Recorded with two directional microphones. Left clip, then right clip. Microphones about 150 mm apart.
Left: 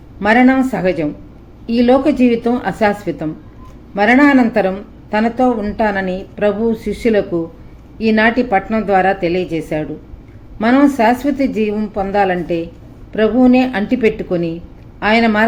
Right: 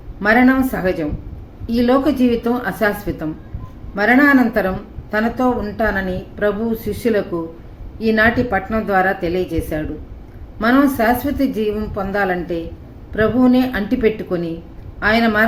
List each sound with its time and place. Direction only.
0.2 s a woman's voice: 30° left (ahead or behind)